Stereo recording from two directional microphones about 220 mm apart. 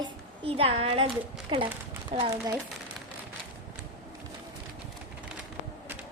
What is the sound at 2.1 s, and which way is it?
Speech, 20° right (ahead or behind).